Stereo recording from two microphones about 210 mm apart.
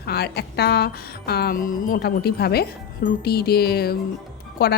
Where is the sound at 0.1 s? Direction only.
50° left (ahead or behind).